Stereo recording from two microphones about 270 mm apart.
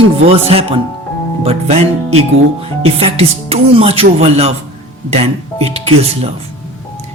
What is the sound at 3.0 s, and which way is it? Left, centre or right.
Speech, right.